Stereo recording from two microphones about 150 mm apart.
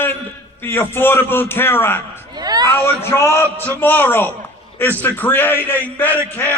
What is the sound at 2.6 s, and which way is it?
A man's voice, 15° left (ahead or behind).